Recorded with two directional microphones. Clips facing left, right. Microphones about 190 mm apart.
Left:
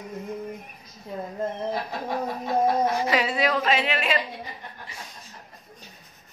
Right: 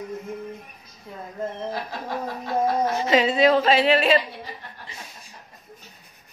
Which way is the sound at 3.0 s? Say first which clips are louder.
Right 5 dB; 25° right (ahead or behind).